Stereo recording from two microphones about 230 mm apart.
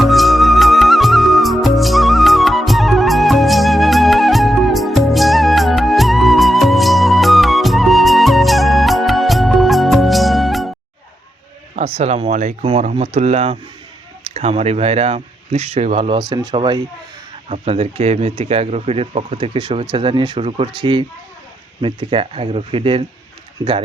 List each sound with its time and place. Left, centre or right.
0.0 s music: centre
11.8 s speech: right